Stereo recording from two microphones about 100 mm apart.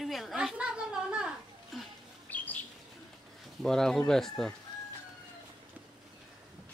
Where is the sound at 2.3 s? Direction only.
15° left (ahead or behind).